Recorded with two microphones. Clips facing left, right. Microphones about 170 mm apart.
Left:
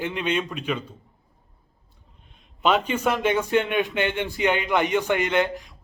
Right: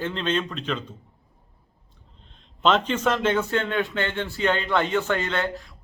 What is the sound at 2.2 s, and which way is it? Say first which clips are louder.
A man's voice: right 1 dB; 10° left (ahead or behind).